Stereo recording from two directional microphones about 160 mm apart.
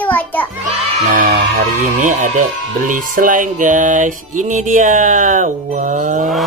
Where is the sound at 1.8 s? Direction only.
50° right (ahead or behind).